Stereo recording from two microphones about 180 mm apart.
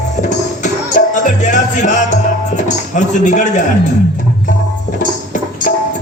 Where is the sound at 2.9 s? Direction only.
45° left (ahead or behind).